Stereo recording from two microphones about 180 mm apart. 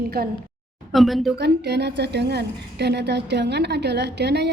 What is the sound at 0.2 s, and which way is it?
Speech, 60° right (ahead or behind).